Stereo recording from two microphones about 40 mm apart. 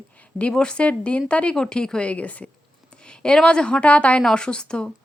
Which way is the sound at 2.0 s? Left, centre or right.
Left.